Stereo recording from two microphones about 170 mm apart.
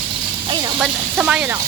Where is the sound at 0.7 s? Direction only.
10° right (ahead or behind).